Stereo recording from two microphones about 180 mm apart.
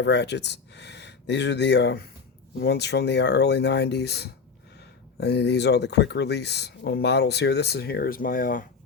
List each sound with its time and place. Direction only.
0.0 s speech: 70° left (ahead or behind); by 8.6 s 50° left (ahead or behind)